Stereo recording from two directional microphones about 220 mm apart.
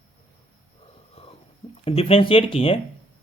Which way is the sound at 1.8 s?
25° left (ahead or behind).